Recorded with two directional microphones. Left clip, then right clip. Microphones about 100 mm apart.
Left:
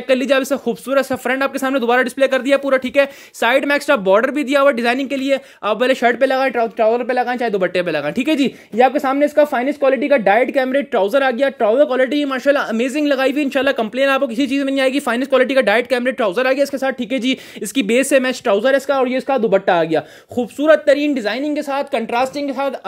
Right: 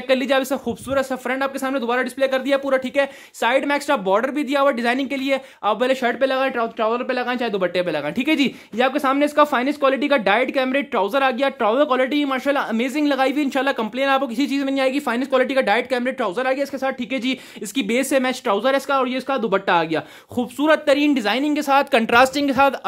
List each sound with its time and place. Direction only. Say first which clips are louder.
0.1 s speech: left 3 dB; 25° left (ahead or behind)
1.3 s speech: left 5 dB; 45° left (ahead or behind); by 10.3 s centre (ahead or behind)
10.3 s speech: left 4 dB; 15° left (ahead or behind)
20.3 s speech: left 5 dB; centre (ahead or behind)
21.1 s a woman's voice: even; 15° right (ahead or behind)
21.5 s speech: right 2 dB; 30° right (ahead or behind)
22.1 s speech: right 5 dB; 45° right (ahead or behind)